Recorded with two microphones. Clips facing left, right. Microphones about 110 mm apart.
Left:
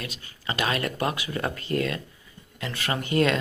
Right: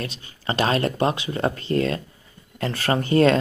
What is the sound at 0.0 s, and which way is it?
Speech, 25° right (ahead or behind).